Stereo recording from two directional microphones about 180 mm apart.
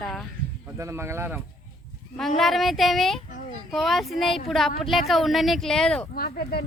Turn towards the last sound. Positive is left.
turn(degrees=60)  # may be behind; listen again after turning